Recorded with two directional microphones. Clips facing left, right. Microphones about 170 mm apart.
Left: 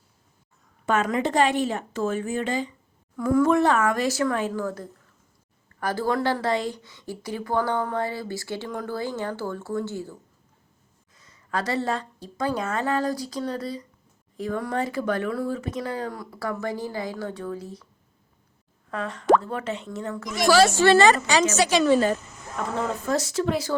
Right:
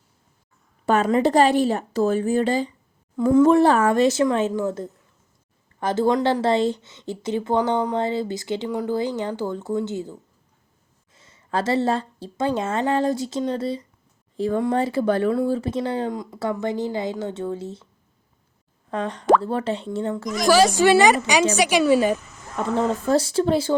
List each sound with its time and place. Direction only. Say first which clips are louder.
0.9 s a woman's voice: right 5 dB; 35° right (ahead or behind)
3.2 s a woman's voice: right 5 dB; 25° right (ahead or behind)
18.9 s a woman's voice: right 2 dB; 30° right (ahead or behind)
20.5 s a woman's voice: right 2 dB; 10° right (ahead or behind)
22.5 s a woman's voice: right 5 dB; 30° right (ahead or behind)